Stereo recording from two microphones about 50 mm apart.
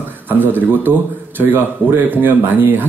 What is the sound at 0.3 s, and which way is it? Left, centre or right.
Speech, right.